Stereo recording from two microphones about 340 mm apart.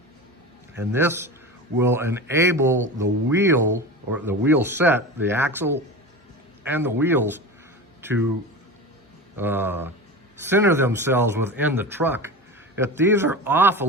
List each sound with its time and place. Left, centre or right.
0.8 s a man's voice: centre
9.4 s speech: centre